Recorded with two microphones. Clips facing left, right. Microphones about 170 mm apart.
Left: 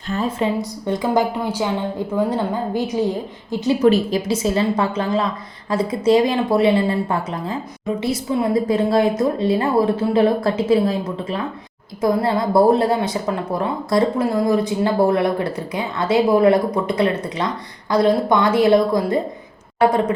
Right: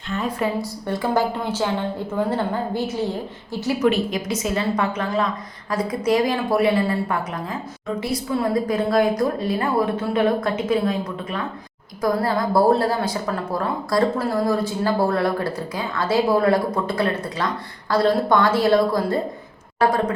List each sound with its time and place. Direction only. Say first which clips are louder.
0.1 s a woman's voice: left 3 dB; 25° left (ahead or behind)
3.8 s a woman's voice: left 4 dB; 35° left (ahead or behind); by 18.8 s 20° left (ahead or behind)